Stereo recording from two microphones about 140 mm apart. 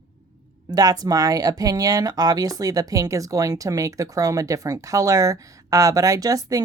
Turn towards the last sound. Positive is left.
turn(degrees=-25)  # may be behind; listen again after turning